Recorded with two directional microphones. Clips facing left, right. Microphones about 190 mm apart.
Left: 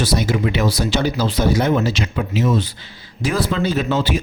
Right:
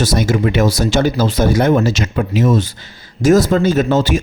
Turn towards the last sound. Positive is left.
turn(degrees=-45)  # may be behind; listen again after turning